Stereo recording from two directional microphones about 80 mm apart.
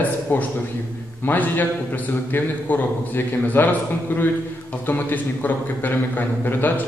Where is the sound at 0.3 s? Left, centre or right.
Left.